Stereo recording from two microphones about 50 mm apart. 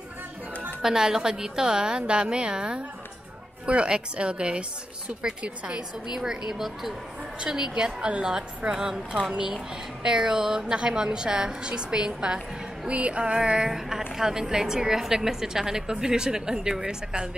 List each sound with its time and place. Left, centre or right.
0.8 s a woman's voice: centre
6.1 s a woman's voice: centre
13.7 s a woman's voice: centre